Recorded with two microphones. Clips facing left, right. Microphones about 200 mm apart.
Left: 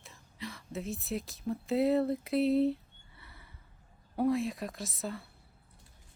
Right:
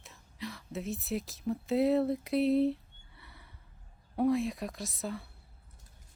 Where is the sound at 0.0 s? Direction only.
Centre (ahead or behind).